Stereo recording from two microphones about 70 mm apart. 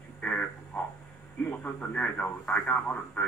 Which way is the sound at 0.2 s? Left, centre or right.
Left.